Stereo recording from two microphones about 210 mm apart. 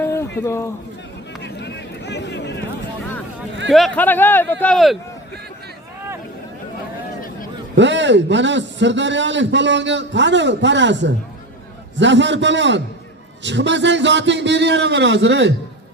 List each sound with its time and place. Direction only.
0.0 s a sound: 10° left (ahead or behind)
1.4 s vehicle: 55° left (ahead or behind)
3.7 s speech: centre (ahead or behind)
7.8 s a man's voice: 60° right (ahead or behind)